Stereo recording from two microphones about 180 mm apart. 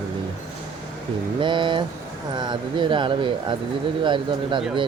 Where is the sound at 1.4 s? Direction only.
25° right (ahead or behind).